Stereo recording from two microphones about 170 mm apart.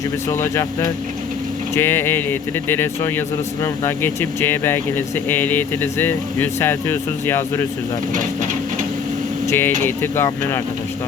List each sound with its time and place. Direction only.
0.3 s a man's voice: 15° left (ahead or behind)
9.5 s a man's voice: 15° left (ahead or behind)